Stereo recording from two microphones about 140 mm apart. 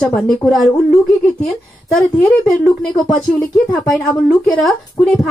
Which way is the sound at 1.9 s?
Centre (ahead or behind).